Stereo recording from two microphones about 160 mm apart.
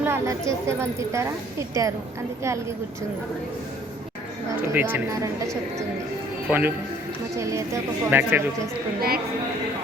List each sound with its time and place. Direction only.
0.0 s a woman's voice: 15° right (ahead or behind)
4.7 s a woman's voice: 10° right (ahead or behind)
6.5 s a woman's voice: 10° right (ahead or behind)
9.0 s a woman's voice: 70° right (ahead or behind)